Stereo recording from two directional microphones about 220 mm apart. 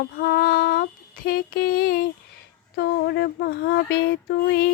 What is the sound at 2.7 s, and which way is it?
Music, 45° left (ahead or behind).